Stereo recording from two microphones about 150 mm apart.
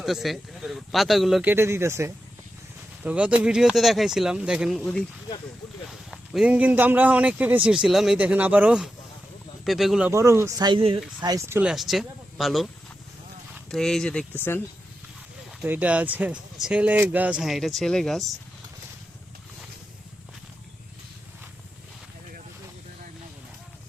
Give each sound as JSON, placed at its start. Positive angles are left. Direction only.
{"t": 0.0, "sound": "speech", "side_deg": 0}
{"t": 1.5, "sound": "a man's voice", "side_deg": -15}
{"t": 4.8, "sound": "a man's voice", "side_deg": 5}
{"t": 10.1, "sound": "speech", "side_deg": -20}
{"t": 10.7, "sound": "speech", "side_deg": -35}
{"t": 11.2, "sound": "speech", "side_deg": -25}
{"t": 11.7, "sound": "speech", "side_deg": 0}
{"t": 13.7, "sound": "speech", "side_deg": 5}
{"t": 15.6, "sound": "a man's voice", "side_deg": -10}